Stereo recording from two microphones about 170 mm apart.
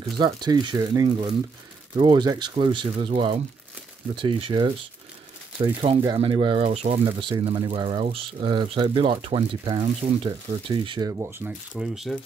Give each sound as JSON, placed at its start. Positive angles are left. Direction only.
{"t": 0.2, "sound": "speech", "side_deg": -25}
{"t": 5.8, "sound": "speech", "side_deg": -35}
{"t": 11.7, "sound": "speech", "side_deg": 0}